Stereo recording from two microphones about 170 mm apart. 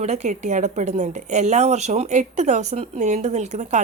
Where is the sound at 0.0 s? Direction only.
40° right (ahead or behind).